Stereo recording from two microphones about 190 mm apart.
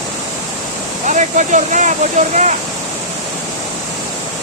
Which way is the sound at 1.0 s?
40° right (ahead or behind).